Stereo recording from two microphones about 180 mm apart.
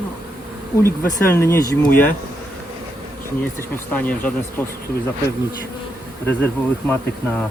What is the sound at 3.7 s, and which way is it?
Speech, 10° left (ahead or behind).